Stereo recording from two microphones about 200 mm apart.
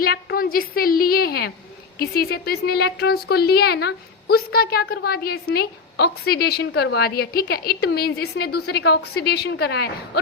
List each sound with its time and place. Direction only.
0.0 s speech: 50° left (ahead or behind)